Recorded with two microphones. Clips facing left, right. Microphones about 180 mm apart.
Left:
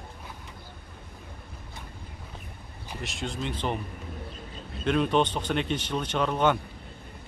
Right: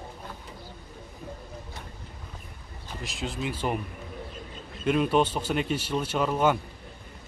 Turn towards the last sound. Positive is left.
turn(degrees=-5)  # may be behind; listen again after turning